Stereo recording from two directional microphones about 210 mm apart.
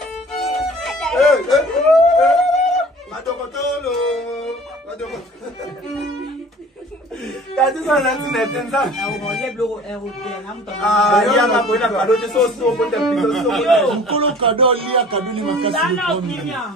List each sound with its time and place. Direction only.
0.4 s music: centre (ahead or behind)
3.3 s a sound: centre (ahead or behind)
7.6 s a man's voice: centre (ahead or behind)
14.1 s speech: 25° right (ahead or behind)
15.7 s a man's voice: centre (ahead or behind)